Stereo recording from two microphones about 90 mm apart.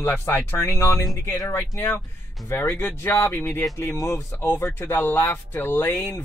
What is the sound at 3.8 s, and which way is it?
Speech, 35° left (ahead or behind).